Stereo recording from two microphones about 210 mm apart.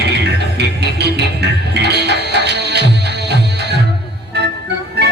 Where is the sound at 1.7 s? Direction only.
55° right (ahead or behind).